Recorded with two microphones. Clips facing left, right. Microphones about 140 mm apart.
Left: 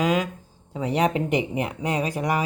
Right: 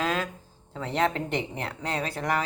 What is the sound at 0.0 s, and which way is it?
Speech, 10° left (ahead or behind).